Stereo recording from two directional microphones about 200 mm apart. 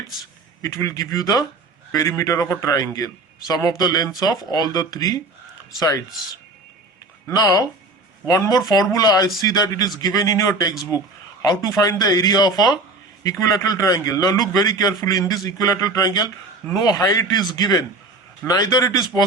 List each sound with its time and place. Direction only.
0.6 s a man's voice: 15° left (ahead or behind)
7.3 s a man's voice: 15° left (ahead or behind)